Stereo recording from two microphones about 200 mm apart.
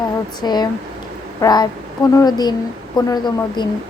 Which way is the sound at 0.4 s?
20° left (ahead or behind).